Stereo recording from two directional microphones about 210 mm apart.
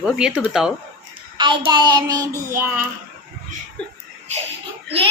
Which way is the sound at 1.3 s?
20° right (ahead or behind).